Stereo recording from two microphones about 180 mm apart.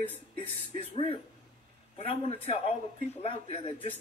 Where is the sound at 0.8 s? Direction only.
30° left (ahead or behind).